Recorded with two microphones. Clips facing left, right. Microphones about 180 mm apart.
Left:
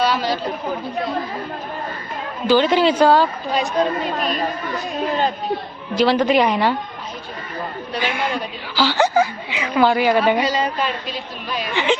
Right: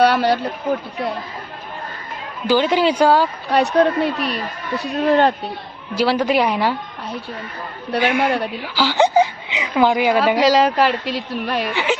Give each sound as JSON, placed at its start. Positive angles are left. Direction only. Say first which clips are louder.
{"t": 0.0, "sound": "a woman's voice", "louder": "right 5 dB", "side_deg": -65}
{"t": 2.5, "sound": "a woman's voice", "louder": "left 1 dB", "side_deg": -10}
{"t": 3.5, "sound": "a woman's voice", "louder": "right 7 dB", "side_deg": -65}
{"t": 6.0, "sound": "a woman's voice", "louder": "left 1 dB", "side_deg": -10}
{"t": 7.9, "sound": "a woman's voice", "louder": "right 6 dB", "side_deg": -65}
{"t": 8.7, "sound": "a woman's voice", "louder": "right 1 dB", "side_deg": -15}
{"t": 10.4, "sound": "a woman's voice", "louder": "right 7 dB", "side_deg": -90}
{"t": 11.7, "sound": "a woman's voice", "louder": "left 5 dB", "side_deg": -10}